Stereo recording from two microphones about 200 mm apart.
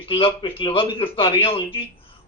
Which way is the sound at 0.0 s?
25° left (ahead or behind).